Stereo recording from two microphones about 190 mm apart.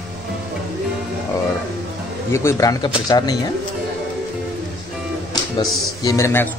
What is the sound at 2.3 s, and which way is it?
Speech, 15° left (ahead or behind).